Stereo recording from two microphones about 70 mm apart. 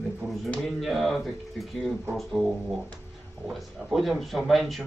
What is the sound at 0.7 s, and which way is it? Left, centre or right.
Speech, centre.